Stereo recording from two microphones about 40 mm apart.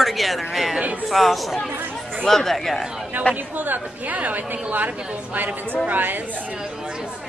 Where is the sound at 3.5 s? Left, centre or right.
Right.